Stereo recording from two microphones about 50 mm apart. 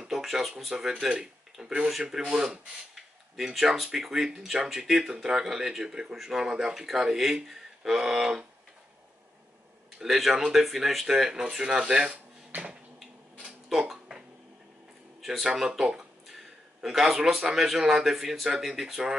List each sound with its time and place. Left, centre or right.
0.0 s speech: centre
7.4 s a sound: centre
9.9 s speech: centre
12.4 s finger snapping: right
13.5 s a sound: centre
15.4 s speech: centre